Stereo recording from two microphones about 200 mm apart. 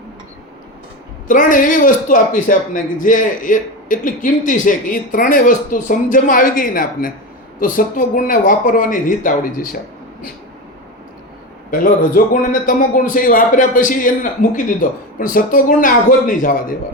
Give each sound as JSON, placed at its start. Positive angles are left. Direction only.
{"t": 1.3, "sound": "speech", "side_deg": 40}
{"t": 11.7, "sound": "a man's voice", "side_deg": 45}